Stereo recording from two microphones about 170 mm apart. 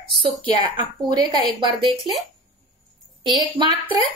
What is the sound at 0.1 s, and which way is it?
A woman's voice, 30° right (ahead or behind).